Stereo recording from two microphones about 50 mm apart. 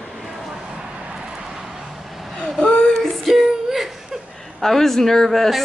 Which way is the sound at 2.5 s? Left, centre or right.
Centre.